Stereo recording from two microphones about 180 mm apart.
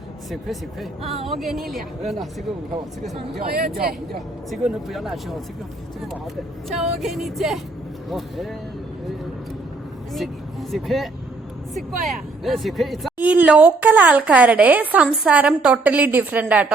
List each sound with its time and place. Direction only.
0.3 s speech: centre (ahead or behind)
3.5 s speech: 55° right (ahead or behind)
4.5 s speech: centre (ahead or behind)
6.7 s speech: centre (ahead or behind)
10.2 s speech: centre (ahead or behind)